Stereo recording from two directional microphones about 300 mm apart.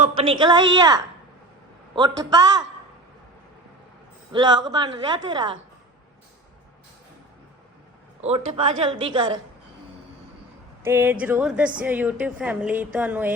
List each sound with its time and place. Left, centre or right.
0.0 s a woman's voice: centre
4.3 s a woman's voice: centre
8.2 s a man's voice: centre
10.8 s a woman's voice: centre